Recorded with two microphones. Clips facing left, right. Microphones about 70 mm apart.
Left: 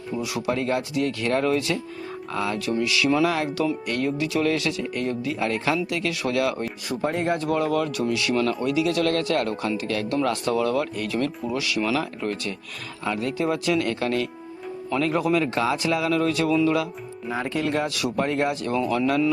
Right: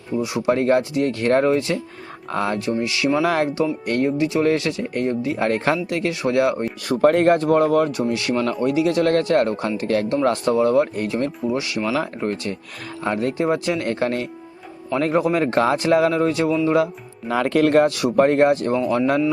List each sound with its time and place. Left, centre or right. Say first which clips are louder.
0.2 s speech: right 6 dB; right
2.6 s speech: right 1 dB; right
3.2 s speech: right 4 dB; right
6.8 s speech: right 10 dB; right
7.4 s speech: right 6 dB; right
16.1 s speech: right 2 dB; right
17.2 s speech: right 8 dB; right
17.8 s speech: right 8 dB; right